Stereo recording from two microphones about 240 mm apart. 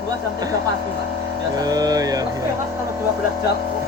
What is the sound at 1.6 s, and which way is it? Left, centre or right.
Speech, centre.